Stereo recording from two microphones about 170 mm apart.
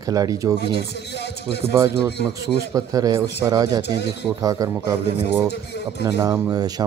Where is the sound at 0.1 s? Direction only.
20° right (ahead or behind).